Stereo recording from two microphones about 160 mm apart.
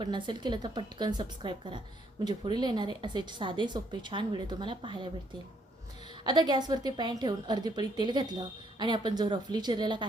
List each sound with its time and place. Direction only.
0.0 s a woman's voice: 30° right (ahead or behind)
6.2 s a woman's voice: 25° right (ahead or behind)